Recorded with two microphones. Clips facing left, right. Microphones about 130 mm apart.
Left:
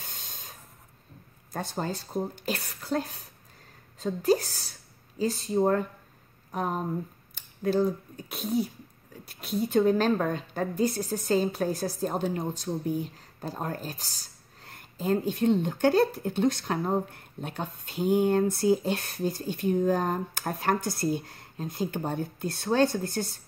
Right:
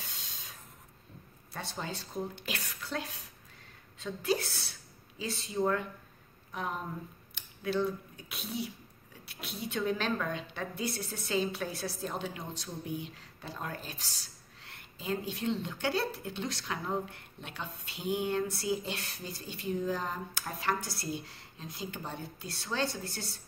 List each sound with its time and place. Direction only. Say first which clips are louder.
0.0 s spray: left 3 dB; 50° left (ahead or behind)
1.5 s a woman's voice: left 7 dB; 45° left (ahead or behind)